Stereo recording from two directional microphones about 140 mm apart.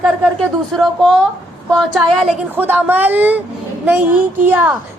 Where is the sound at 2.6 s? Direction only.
15° right (ahead or behind).